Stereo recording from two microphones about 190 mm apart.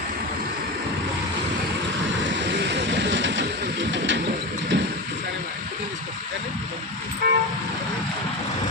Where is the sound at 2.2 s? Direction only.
70° right (ahead or behind).